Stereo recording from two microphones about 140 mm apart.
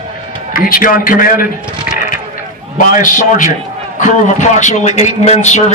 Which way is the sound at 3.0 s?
65° left (ahead or behind).